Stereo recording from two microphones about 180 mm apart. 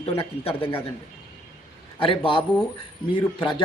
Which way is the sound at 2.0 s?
30° left (ahead or behind).